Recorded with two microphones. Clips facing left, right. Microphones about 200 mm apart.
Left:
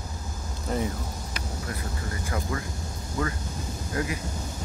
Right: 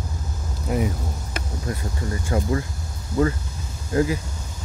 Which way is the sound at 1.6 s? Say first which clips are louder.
Right 7 dB; 30° right (ahead or behind).